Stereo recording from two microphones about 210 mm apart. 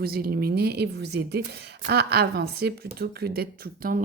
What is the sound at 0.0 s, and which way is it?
Speech, 45° right (ahead or behind).